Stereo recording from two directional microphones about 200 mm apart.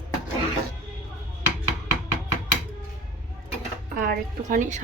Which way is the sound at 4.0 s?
45° right (ahead or behind).